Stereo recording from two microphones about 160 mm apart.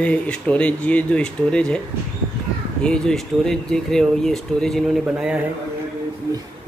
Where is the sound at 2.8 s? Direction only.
5° left (ahead or behind).